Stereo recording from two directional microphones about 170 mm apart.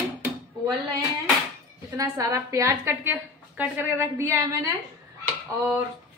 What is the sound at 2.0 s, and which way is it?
A woman's voice, 20° right (ahead or behind).